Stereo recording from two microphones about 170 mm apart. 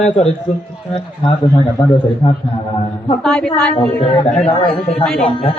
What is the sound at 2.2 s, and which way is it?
Speech, 35° left (ahead or behind).